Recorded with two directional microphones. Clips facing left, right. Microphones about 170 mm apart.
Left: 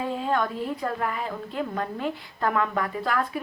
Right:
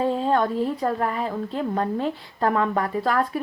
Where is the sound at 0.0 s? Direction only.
30° right (ahead or behind).